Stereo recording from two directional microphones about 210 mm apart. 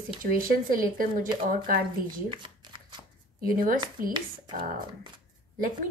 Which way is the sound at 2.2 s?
25° right (ahead or behind).